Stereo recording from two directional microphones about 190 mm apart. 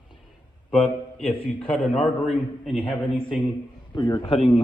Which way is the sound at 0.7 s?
5° left (ahead or behind).